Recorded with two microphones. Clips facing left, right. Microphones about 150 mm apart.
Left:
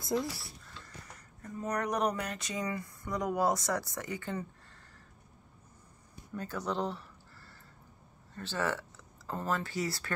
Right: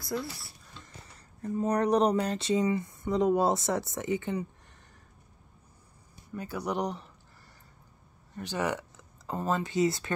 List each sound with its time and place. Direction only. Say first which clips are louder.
0.0 s speech: left 2 dB; 20° left (ahead or behind)
0.7 s speech: right 2 dB; 25° right (ahead or behind)
6.3 s speech: right 3 dB; 10° right (ahead or behind)
8.4 s speech: right 3 dB; 15° right (ahead or behind)